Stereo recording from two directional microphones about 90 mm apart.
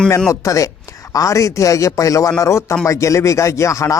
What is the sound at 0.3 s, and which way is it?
Speech, 35° left (ahead or behind).